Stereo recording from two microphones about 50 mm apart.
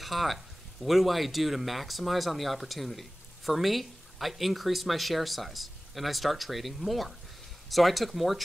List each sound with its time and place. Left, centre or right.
0.0 s speech: centre